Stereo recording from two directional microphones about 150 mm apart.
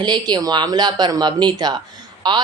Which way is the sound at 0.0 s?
30° right (ahead or behind).